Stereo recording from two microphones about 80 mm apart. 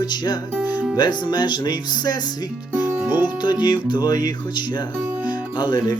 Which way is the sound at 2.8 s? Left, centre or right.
Left.